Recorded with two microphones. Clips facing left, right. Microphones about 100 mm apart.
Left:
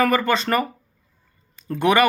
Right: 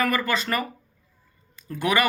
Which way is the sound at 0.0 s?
30° left (ahead or behind).